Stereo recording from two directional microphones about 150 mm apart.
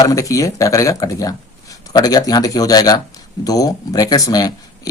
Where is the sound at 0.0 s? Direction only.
20° left (ahead or behind).